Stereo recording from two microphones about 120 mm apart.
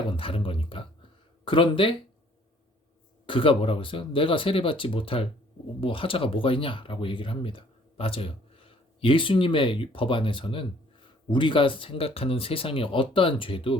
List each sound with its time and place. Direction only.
0.1 s speech: 50° left (ahead or behind)
3.2 s speech: 50° left (ahead or behind)